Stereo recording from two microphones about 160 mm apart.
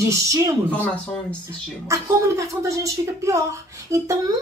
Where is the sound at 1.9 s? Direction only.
20° right (ahead or behind).